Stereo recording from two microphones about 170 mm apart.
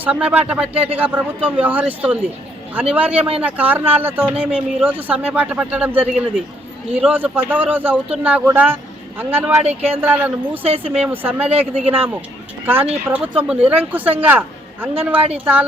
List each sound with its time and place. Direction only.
0.0 s speech: 5° right (ahead or behind)
10.7 s speech: 35° right (ahead or behind)
11.0 s speech: 10° right (ahead or behind)